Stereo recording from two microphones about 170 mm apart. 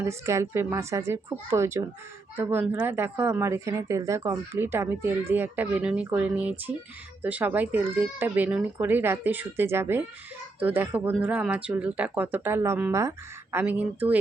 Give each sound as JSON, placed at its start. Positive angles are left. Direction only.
{"t": 0.0, "sound": "speech", "side_deg": -15}